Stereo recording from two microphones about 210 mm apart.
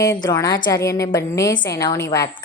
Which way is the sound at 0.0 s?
15° left (ahead or behind).